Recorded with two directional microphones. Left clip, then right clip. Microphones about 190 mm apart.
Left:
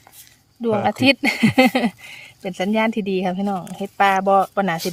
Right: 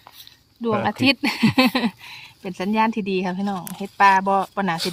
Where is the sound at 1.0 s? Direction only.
45° left (ahead or behind).